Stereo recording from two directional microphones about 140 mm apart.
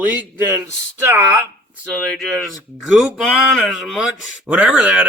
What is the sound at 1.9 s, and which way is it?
Speech, 5° left (ahead or behind).